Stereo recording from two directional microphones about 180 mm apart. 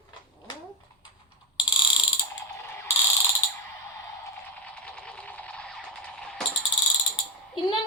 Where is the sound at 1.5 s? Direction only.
25° left (ahead or behind).